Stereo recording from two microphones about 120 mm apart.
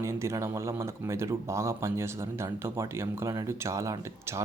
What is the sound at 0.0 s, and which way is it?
Speech, 25° right (ahead or behind).